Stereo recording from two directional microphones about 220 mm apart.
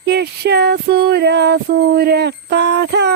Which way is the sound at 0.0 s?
50° right (ahead or behind).